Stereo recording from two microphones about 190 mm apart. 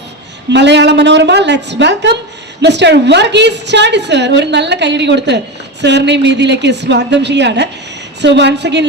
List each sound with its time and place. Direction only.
0.5 s a woman's voice: 65° right (ahead or behind)